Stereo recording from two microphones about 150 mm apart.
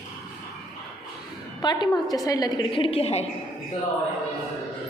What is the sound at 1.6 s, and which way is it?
A woman's voice, 25° left (ahead or behind).